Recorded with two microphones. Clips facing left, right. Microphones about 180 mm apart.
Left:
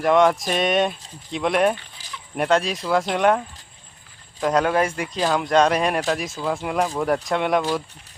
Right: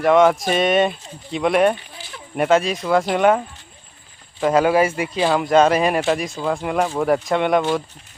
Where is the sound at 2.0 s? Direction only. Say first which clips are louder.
Right 1 dB; 40° left (ahead or behind).